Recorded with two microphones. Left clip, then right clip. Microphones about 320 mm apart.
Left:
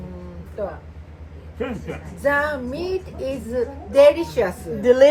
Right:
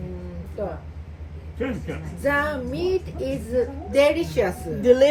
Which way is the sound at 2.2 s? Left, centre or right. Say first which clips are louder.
Left 3 dB; centre.